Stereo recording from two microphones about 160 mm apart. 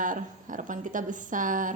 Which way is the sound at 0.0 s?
55° right (ahead or behind).